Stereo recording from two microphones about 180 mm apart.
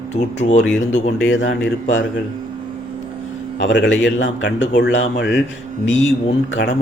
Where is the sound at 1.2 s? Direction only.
85° left.